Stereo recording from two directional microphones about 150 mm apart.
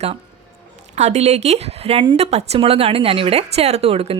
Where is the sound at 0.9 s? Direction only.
50° right (ahead or behind).